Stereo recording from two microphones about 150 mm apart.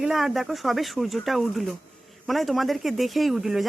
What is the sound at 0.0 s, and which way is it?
A woman's voice, centre (ahead or behind).